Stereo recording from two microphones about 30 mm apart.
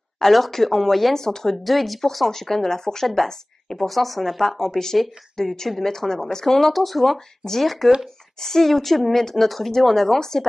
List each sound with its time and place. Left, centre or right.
0.5 s speech: centre
1.1 s speech: centre
1.6 s speech: centre
3.8 s speech: centre